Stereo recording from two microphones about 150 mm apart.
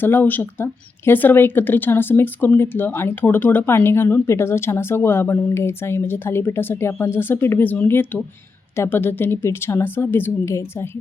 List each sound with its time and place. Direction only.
0.0 s speech: 15° left (ahead or behind)